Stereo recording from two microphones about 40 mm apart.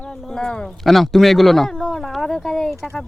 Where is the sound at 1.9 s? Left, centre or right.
Centre.